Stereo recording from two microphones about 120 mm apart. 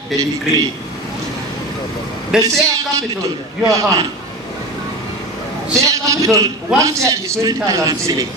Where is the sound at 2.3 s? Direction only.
5° right (ahead or behind).